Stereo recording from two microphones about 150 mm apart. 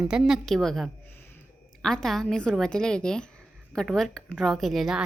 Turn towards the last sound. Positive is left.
turn(degrees=0)  # may be behind; listen again after turning